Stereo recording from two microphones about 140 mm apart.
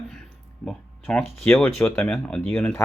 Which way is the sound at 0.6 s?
5° left (ahead or behind).